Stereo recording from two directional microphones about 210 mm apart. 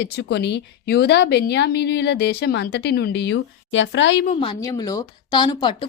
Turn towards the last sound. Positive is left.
turn(degrees=20)  # may be behind; listen again after turning